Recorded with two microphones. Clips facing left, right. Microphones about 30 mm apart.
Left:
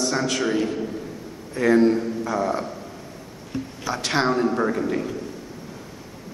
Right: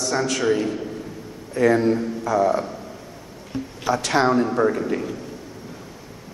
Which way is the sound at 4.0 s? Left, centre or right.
Centre.